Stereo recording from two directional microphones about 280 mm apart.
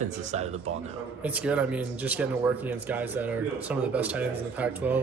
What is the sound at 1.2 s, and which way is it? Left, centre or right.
Speech, centre.